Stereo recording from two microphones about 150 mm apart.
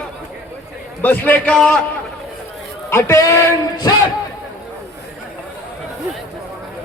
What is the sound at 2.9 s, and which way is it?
Speech, 20° left (ahead or behind).